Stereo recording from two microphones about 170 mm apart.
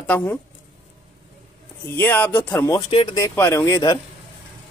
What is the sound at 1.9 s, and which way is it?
Speech, 10° left (ahead or behind).